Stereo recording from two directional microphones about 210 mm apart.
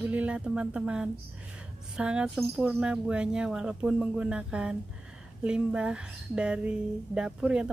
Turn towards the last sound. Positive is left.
turn(degrees=-5)  # may be behind; listen again after turning